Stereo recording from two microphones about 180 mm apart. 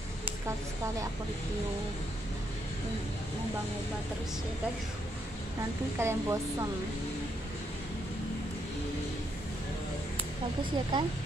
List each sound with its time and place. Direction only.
5.9 s speech: 15° right (ahead or behind)
10.6 s speech: 25° right (ahead or behind)